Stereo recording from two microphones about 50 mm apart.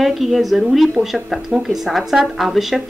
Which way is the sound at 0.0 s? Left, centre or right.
Centre.